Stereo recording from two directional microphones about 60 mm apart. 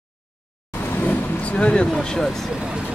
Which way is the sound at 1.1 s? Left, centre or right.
Centre.